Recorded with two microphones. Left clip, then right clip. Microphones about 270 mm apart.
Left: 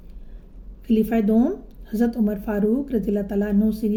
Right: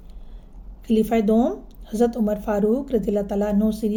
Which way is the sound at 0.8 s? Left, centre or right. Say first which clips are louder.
Right 2 dB; right.